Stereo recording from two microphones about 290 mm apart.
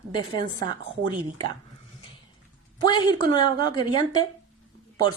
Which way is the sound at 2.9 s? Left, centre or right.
Centre.